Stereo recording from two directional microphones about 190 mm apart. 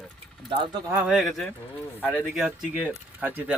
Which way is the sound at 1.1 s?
Centre (ahead or behind).